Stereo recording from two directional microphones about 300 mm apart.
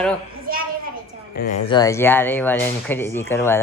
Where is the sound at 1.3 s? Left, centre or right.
Left.